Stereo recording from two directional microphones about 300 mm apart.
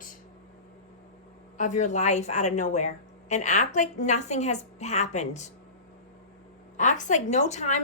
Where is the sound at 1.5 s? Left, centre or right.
Left.